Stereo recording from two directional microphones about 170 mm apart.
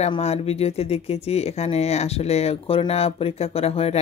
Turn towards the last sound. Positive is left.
turn(degrees=35)  # may be behind; listen again after turning